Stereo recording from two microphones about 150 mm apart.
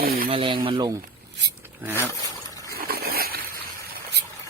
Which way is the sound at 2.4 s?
20° left (ahead or behind).